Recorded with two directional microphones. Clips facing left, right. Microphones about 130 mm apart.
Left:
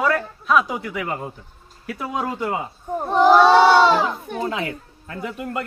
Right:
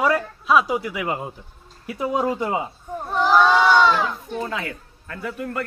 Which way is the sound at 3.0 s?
30° left (ahead or behind).